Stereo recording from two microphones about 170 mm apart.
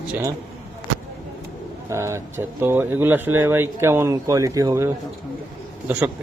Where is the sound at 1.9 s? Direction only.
15° right (ahead or behind).